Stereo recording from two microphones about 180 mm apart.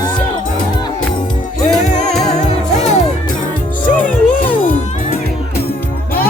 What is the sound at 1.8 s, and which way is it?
Music, 40° left (ahead or behind).